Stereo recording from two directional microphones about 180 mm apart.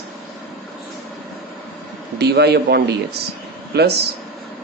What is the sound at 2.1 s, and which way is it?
A man's voice, 65° right (ahead or behind).